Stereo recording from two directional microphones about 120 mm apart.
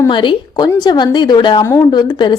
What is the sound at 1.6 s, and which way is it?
Speech, 25° left (ahead or behind).